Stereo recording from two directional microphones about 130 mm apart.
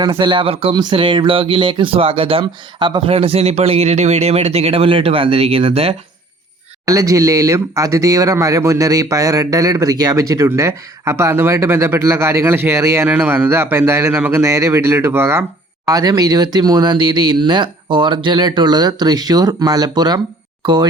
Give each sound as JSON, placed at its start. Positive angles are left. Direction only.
{"t": 0.0, "sound": "speech", "side_deg": -35}
{"t": 0.7, "sound": "speech", "side_deg": -35}
{"t": 6.8, "sound": "speech", "side_deg": -25}
{"t": 15.9, "sound": "speech", "side_deg": -30}